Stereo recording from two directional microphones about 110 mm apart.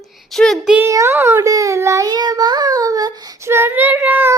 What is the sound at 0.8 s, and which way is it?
Child singing, 25° right (ahead or behind).